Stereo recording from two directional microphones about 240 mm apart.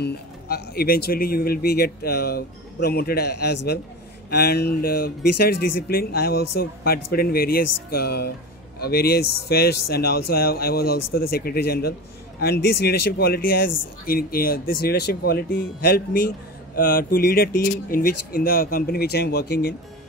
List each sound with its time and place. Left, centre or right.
0.0 s speech: left